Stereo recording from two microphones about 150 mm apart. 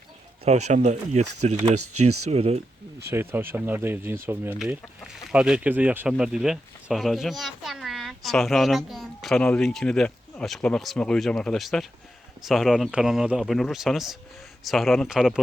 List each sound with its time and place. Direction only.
0.4 s speech: 50° right (ahead or behind)
3.1 s speech: 15° right (ahead or behind)
4.5 s speech: 5° right (ahead or behind)